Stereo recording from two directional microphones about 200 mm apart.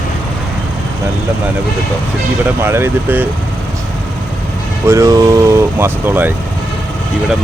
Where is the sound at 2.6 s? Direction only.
10° right (ahead or behind).